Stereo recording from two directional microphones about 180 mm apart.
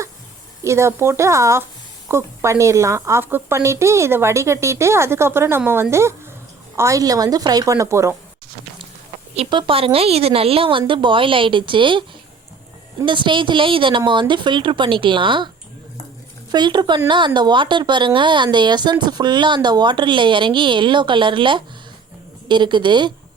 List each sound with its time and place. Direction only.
0.6 s a woman's voice: 15° right (ahead or behind)
9.3 s a woman's voice: 30° right (ahead or behind)
16.5 s a woman's voice: 25° right (ahead or behind)